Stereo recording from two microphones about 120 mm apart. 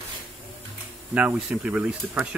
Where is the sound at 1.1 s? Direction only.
10° right (ahead or behind).